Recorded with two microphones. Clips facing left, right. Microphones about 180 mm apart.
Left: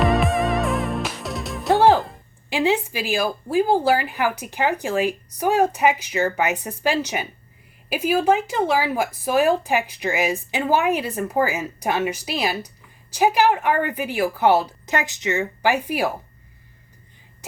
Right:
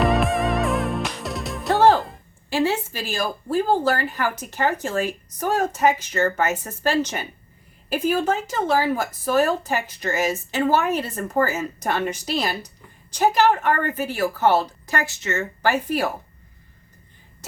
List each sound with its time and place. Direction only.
0.0 s music: centre (ahead or behind)
1.7 s music: 15° left (ahead or behind)
2.5 s speech: 15° left (ahead or behind)